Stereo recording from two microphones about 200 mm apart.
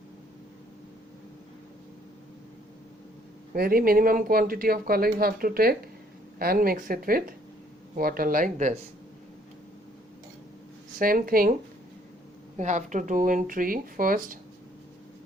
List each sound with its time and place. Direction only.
3.5 s speech: 45° right (ahead or behind)
10.9 s speech: 45° right (ahead or behind)
12.5 s speech: 35° right (ahead or behind)